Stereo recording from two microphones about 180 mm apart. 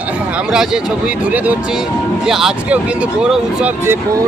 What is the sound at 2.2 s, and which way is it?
Speech, centre (ahead or behind).